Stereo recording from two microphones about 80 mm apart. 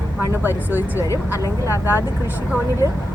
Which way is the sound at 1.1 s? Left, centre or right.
Left.